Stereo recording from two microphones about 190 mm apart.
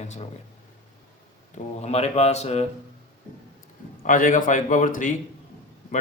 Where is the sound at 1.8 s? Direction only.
35° left (ahead or behind).